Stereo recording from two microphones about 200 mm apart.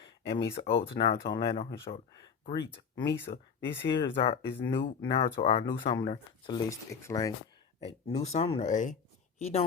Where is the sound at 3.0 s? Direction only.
60° left (ahead or behind).